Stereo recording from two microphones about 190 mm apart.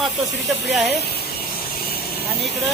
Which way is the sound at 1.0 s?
55° left (ahead or behind).